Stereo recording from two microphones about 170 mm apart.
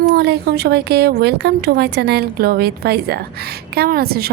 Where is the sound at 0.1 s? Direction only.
75° right (ahead or behind).